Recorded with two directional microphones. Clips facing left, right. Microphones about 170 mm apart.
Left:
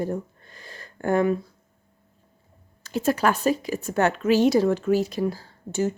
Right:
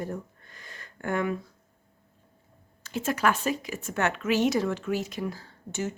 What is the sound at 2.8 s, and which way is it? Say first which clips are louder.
A woman's voice: left 4 dB; 35° left (ahead or behind).